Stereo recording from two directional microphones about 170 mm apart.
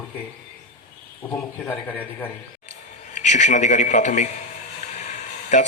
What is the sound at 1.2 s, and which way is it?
A man's voice, 10° left (ahead or behind).